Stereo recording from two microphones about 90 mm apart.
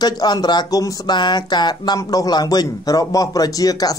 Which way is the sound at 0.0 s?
50° left (ahead or behind).